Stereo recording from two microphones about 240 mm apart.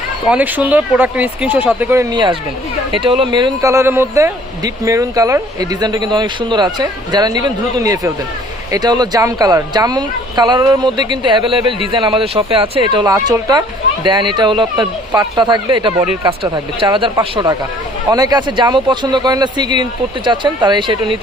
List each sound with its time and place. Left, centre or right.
0.3 s speech: centre